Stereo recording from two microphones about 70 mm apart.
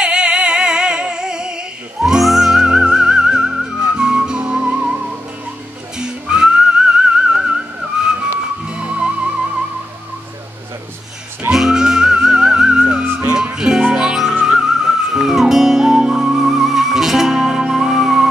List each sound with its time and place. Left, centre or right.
0.0 s music: centre
5.9 s whistling: centre
8.0 s music: centre
11.5 s music: centre
13.0 s music: right
13.3 s music: centre